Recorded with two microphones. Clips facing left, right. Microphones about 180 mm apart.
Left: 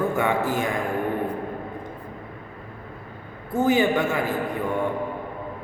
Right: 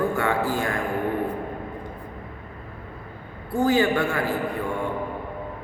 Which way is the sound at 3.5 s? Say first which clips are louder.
Even; 20° left (ahead or behind).